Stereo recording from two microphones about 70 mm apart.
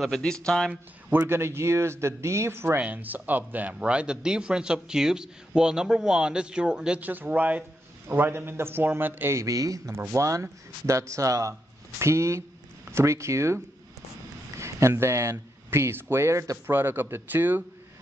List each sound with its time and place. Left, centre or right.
0.2 s speech: centre
1.1 s speech: right
2.8 s a man's voice: right
7.0 s speech: right
9.4 s speech: right
14.6 s speech: right
16.7 s speech: right